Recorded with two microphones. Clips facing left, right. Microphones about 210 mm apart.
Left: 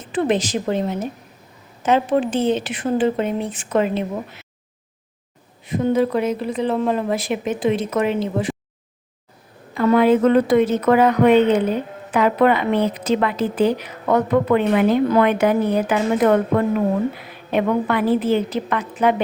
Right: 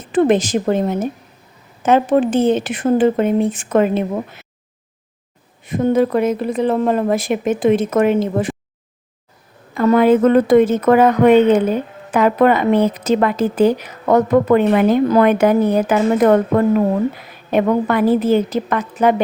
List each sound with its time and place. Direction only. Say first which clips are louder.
0.1 s a woman's voice: right 6 dB; 50° right (ahead or behind)
5.6 s a woman's voice: right 3 dB; 50° right (ahead or behind)
9.7 s a woman's voice: right 3 dB; 45° right (ahead or behind)